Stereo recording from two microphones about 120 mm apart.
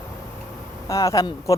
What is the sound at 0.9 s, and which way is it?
Speech, 25° left (ahead or behind).